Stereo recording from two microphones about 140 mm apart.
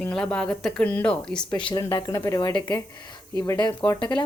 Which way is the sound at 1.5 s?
35° left (ahead or behind).